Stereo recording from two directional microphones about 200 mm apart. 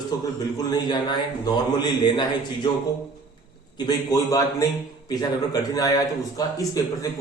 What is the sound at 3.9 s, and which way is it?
A man's voice, 15° left (ahead or behind).